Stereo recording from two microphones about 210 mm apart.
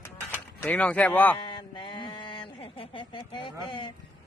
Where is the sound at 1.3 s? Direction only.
25° left (ahead or behind).